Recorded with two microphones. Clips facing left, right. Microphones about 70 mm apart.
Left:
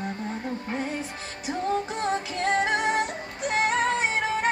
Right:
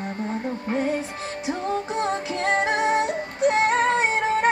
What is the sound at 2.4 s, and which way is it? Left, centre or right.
Music, right.